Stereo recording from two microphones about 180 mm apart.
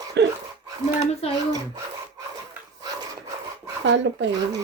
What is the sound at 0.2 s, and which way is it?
Speech, 75° right (ahead or behind).